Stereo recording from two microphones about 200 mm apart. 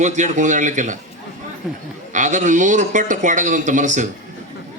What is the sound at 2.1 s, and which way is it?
A man's voice, 40° right (ahead or behind).